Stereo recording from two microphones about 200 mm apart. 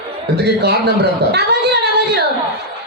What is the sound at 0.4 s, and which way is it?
Speech, 55° right (ahead or behind).